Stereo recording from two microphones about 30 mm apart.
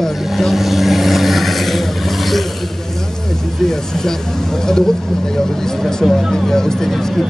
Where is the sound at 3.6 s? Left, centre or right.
Centre.